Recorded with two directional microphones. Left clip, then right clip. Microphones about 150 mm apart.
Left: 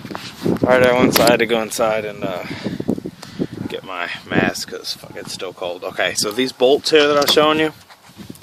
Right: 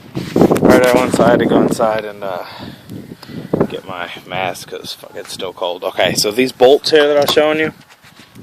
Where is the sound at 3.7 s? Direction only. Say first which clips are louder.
Even; 5° right (ahead or behind); by 6.8 s 25° right (ahead or behind).